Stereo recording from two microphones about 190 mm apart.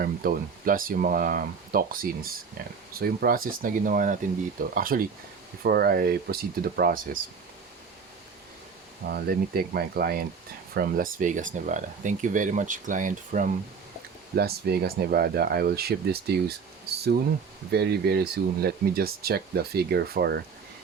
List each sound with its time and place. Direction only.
0.0 s speech: 50° right (ahead or behind)
9.0 s speech: 55° right (ahead or behind)
14.3 s speech: 55° right (ahead or behind)
17.7 s speech: 60° right (ahead or behind)